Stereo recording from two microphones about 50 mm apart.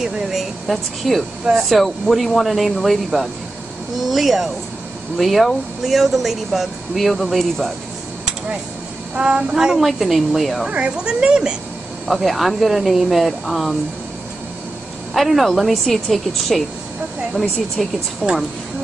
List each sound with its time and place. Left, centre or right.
0.0 s speech: centre
9.1 s speech: centre
9.8 s speech: centre
10.7 s a woman's voice: right
12.1 s speech: centre
15.1 s speech: centre